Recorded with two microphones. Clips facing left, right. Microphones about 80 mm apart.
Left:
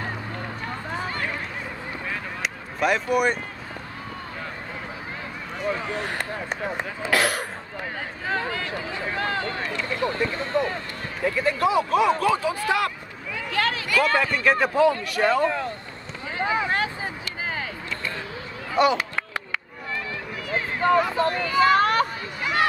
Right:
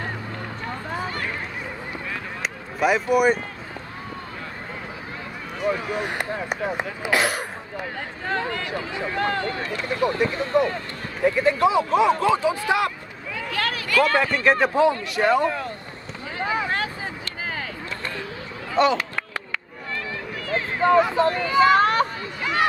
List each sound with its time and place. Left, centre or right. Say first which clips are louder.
2.4 s a sound: right 2 dB; centre
5.7 s speech: right 3 dB; centre
8.3 s speech: right 1 dB; centre
9.9 s speech: right 4 dB; centre
13.6 s a sound: right 1 dB; left
14.1 s speech: right 2 dB; right
16.3 s vehicle: left 1 dB; left
18.8 s chop: right 1 dB; centre
20.8 s speech: right 3 dB; right